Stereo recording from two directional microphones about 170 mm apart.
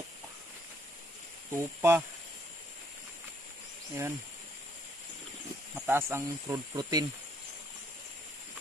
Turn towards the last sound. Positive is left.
turn(degrees=-20)  # may be behind; listen again after turning